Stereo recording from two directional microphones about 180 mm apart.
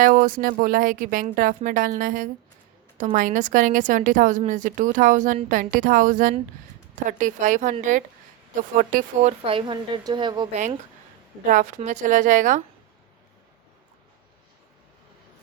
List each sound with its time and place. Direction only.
0.0 s a woman's voice: 50° right (ahead or behind)
9.4 s a woman's voice: 30° right (ahead or behind)
11.4 s a woman's voice: 45° right (ahead or behind)